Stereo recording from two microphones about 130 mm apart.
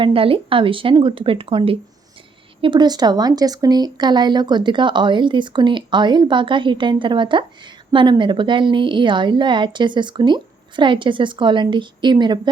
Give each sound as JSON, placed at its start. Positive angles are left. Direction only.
{"t": 0.0, "sound": "speech", "side_deg": -45}